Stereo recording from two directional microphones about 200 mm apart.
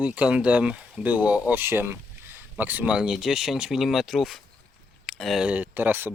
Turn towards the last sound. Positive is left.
turn(degrees=-10)  # may be behind; listen again after turning